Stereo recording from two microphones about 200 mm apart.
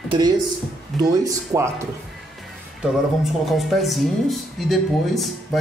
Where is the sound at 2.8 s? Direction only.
Centre (ahead or behind).